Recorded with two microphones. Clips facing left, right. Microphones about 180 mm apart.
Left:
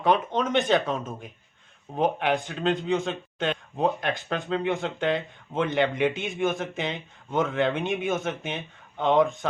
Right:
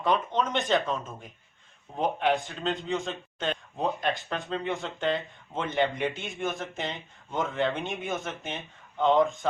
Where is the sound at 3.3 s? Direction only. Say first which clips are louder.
Left 3 dB; 65° left (ahead or behind).